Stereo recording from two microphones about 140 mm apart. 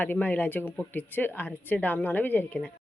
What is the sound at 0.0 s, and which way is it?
Speech, 10° left (ahead or behind).